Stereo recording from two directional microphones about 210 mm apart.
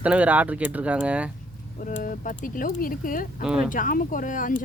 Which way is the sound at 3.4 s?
5° right (ahead or behind).